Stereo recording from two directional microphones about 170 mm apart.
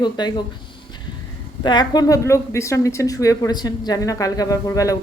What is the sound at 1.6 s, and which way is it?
A woman's voice, 25° left (ahead or behind).